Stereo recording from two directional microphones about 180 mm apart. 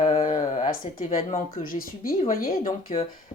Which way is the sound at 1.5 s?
50° left (ahead or behind).